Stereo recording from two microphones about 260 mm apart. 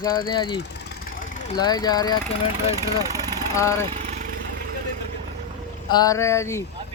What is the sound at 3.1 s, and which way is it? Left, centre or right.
Vehicle, centre.